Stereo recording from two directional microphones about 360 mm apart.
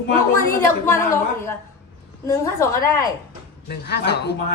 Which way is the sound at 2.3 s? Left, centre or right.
Centre.